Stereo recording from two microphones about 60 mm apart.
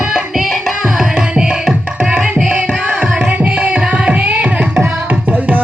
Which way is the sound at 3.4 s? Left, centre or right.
Centre.